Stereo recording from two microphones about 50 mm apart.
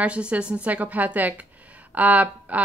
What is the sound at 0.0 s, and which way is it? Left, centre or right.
Speech, right.